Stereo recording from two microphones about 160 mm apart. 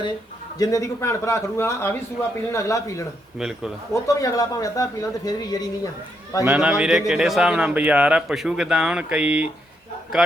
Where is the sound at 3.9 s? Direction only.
20° left (ahead or behind).